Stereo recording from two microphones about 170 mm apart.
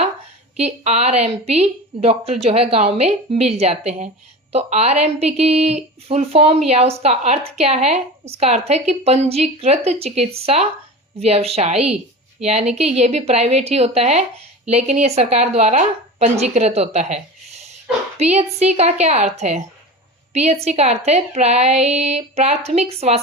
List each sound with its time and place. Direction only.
0.5 s a woman's voice: 40° right (ahead or behind)